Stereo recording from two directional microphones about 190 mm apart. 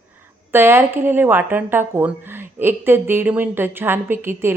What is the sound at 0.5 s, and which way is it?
Speech, 10° right (ahead or behind).